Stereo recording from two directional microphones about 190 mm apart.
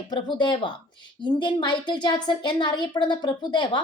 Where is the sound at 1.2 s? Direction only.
25° left (ahead or behind).